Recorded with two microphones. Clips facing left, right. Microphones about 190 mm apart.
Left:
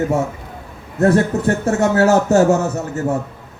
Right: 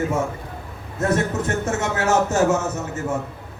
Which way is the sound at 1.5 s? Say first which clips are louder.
Left 7 dB; 35° left (ahead or behind).